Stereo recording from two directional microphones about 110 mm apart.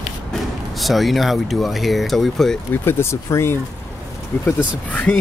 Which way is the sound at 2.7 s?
20° left (ahead or behind).